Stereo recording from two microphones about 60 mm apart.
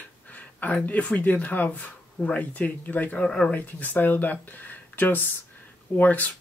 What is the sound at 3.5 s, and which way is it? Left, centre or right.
Speech, left.